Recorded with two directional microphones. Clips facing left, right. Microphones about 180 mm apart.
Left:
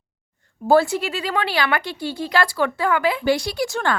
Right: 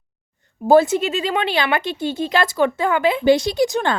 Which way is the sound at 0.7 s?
20° right (ahead or behind).